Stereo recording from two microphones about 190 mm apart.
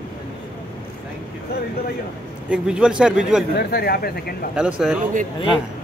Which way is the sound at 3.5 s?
55° left (ahead or behind).